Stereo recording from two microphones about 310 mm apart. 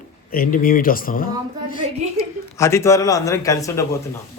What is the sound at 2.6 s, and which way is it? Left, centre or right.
Speech, centre.